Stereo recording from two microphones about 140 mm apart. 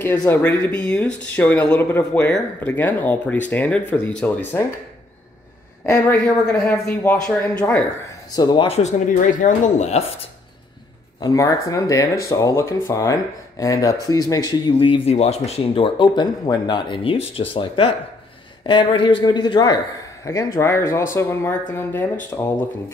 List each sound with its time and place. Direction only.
0.0 s speech: 10° left (ahead or behind)
6.2 s speech: 5° left (ahead or behind)
7.4 s speech: 15° left (ahead or behind)
8.4 s speech: 30° left (ahead or behind)
8.6 s speech: 55° left (ahead or behind)
11.1 s speech: 25° left (ahead or behind)
20.2 s speech: 20° left (ahead or behind)